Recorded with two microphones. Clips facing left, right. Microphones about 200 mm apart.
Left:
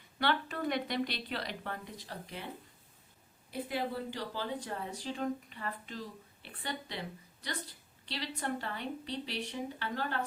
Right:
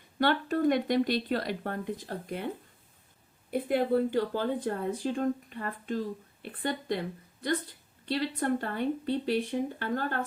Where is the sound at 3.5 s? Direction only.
55° right (ahead or behind).